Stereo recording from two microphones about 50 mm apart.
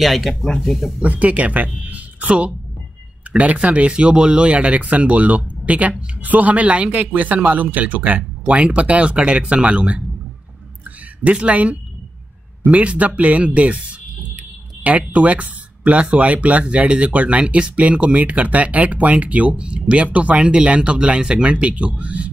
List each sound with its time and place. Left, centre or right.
0.0 s speech: centre
0.9 s speech: right
11.3 s speech: right